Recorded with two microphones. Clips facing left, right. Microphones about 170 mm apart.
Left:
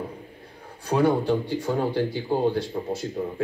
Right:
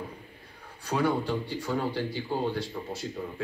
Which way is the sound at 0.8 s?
50° left (ahead or behind).